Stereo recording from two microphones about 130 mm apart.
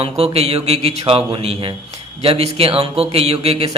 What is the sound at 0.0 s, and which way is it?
A man's voice, 50° right (ahead or behind).